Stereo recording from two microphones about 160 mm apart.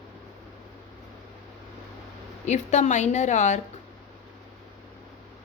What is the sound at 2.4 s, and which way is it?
A woman's voice, 45° left (ahead or behind).